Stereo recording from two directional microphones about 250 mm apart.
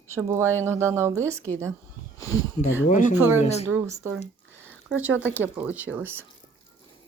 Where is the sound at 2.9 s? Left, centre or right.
Left.